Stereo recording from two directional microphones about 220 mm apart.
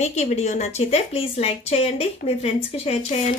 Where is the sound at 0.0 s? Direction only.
30° left (ahead or behind).